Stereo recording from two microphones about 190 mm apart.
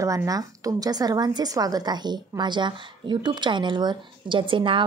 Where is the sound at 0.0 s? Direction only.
15° right (ahead or behind).